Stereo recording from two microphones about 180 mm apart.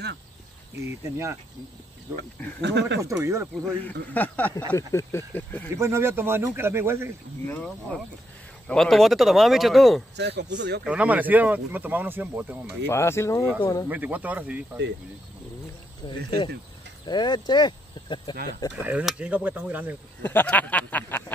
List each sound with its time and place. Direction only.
0.7 s speech: 15° right (ahead or behind)
2.6 s speech: 75° right (ahead or behind)
3.0 s speech: 15° right (ahead or behind)
4.1 s speech: 10° left (ahead or behind)
5.8 s speech: 15° right (ahead or behind)
7.4 s speech: 10° left (ahead or behind)
10.1 s speech: 70° right (ahead or behind)
10.8 s speech: 5° right (ahead or behind)
12.8 s speech: 15° left (ahead or behind)
13.8 s speech: 10° right (ahead or behind)
16.0 s speech: 25° left (ahead or behind)
18.8 s speech: 5° right (ahead or behind)
20.2 s speech: 10° left (ahead or behind)